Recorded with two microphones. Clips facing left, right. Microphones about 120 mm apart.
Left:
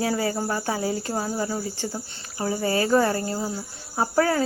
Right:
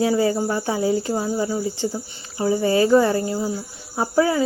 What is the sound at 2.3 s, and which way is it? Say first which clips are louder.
Speech: right 6 dB; 20° right (ahead or behind).